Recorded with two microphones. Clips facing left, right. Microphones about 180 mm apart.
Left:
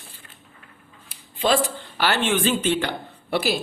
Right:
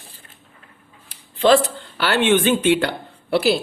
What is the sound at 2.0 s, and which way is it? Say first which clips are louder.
Speech: right 5 dB; 65° right (ahead or behind).